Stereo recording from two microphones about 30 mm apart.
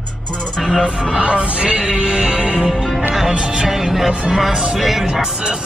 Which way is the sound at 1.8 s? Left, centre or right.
Right.